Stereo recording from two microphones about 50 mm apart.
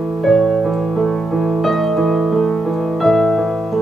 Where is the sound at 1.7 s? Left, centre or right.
Centre.